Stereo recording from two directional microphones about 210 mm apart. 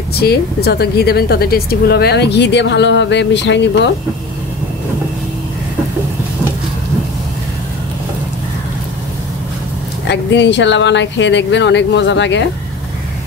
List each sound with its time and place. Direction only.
0.2 s speech: 50° left (ahead or behind)
10.0 s speech: 55° left (ahead or behind)